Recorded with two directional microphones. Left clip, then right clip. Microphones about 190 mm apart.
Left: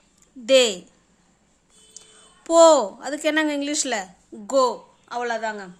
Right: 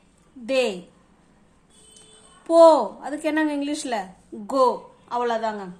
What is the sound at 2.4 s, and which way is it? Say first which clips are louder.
A woman's voice: even; 35° left (ahead or behind).